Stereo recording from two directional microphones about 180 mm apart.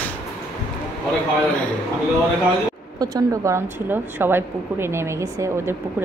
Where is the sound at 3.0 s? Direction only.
20° right (ahead or behind).